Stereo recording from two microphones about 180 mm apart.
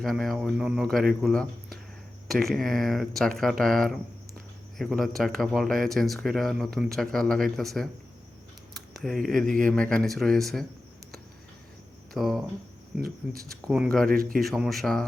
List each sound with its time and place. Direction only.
0.0 s speech: centre (ahead or behind)
12.1 s speech: centre (ahead or behind)
13.7 s speech: centre (ahead or behind)
14.1 s speech: 55° right (ahead or behind)
14.4 s speech: centre (ahead or behind)